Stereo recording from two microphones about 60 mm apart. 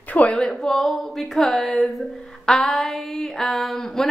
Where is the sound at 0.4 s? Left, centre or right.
Centre.